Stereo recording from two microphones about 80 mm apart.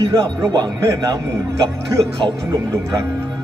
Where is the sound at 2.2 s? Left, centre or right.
Right.